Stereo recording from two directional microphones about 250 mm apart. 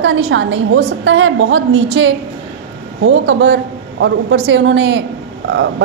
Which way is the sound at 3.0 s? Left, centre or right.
Right.